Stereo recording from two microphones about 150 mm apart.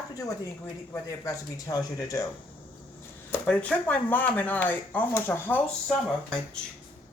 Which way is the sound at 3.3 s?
10° left (ahead or behind).